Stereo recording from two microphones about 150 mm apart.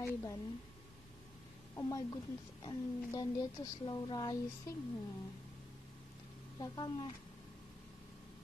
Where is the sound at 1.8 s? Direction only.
25° left (ahead or behind).